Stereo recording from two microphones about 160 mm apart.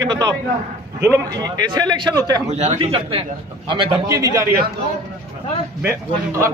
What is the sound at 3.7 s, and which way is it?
Speech, 25° right (ahead or behind).